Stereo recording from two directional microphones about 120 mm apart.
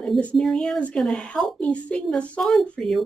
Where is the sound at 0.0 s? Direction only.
5° left (ahead or behind).